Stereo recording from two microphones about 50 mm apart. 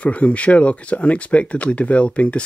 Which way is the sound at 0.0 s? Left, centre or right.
Left.